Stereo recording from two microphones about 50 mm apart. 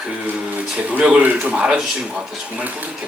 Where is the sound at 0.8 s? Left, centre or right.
Right.